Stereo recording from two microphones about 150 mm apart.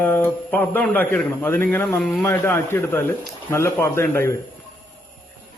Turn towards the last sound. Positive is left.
turn(degrees=15)  # may be behind; listen again after turning